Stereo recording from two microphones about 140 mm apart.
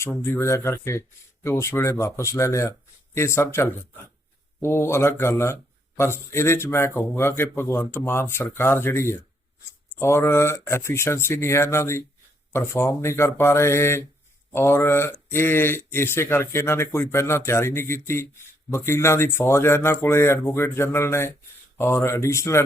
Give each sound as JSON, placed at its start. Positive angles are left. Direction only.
{"t": 0.3, "sound": "speech", "side_deg": 20}